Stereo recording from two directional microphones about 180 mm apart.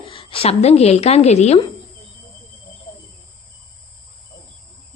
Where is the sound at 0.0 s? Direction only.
30° left (ahead or behind).